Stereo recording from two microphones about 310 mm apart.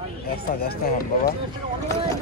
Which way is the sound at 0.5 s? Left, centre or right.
Left.